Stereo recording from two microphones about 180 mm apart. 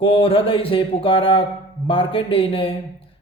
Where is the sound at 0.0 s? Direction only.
30° left (ahead or behind).